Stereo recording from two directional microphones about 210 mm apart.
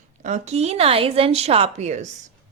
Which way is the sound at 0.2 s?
35° right (ahead or behind).